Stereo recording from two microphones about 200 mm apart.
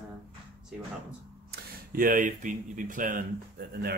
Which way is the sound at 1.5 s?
45° right (ahead or behind).